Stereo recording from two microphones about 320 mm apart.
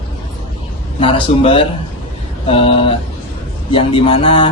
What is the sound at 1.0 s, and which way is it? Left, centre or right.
A man's voice, centre.